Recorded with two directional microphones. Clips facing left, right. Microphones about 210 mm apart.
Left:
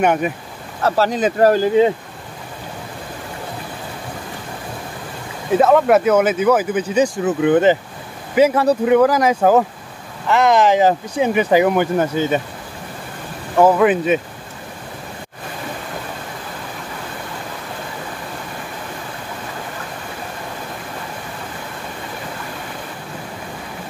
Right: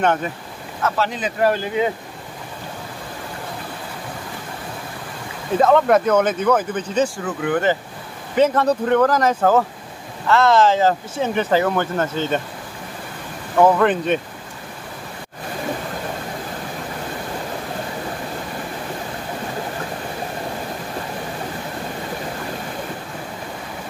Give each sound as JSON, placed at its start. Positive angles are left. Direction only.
{"t": 0.0, "sound": "speech", "side_deg": 15}
{"t": 0.8, "sound": "speech", "side_deg": 40}
{"t": 5.6, "sound": "speech", "side_deg": 5}
{"t": 7.2, "sound": "speech", "side_deg": 20}
{"t": 8.4, "sound": "speech", "side_deg": 10}
{"t": 13.6, "sound": "speech", "side_deg": 10}